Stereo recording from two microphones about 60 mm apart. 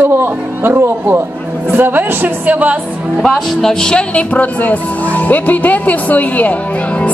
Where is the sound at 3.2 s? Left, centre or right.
Centre.